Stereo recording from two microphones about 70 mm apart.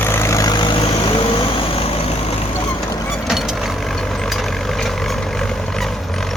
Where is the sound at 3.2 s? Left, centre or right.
Centre.